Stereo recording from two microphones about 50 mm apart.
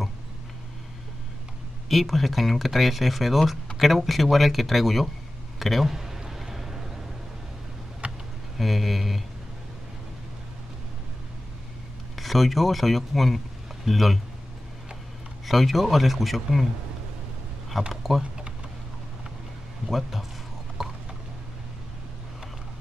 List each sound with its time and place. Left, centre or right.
1.9 s speech: centre
5.6 s a sound: centre
8.0 s a sound: right
8.5 s speech: centre
12.2 s speech: centre
15.4 s speech: centre
17.8 s speech: centre
19.9 s speech: centre
20.8 s a sound: centre